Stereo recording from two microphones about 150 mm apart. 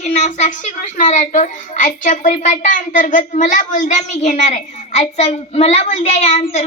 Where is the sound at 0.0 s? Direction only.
50° left (ahead or behind).